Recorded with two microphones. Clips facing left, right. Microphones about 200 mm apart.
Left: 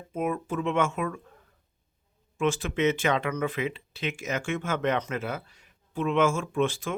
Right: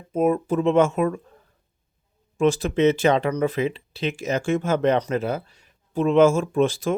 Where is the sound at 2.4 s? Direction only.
40° right (ahead or behind).